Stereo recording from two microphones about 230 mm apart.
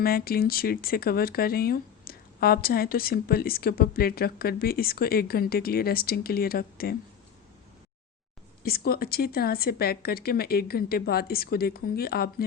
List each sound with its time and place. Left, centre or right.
0.0 s speech: left
8.6 s speech: left